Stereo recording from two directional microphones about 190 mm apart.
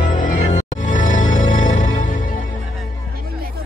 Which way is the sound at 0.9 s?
40° left (ahead or behind).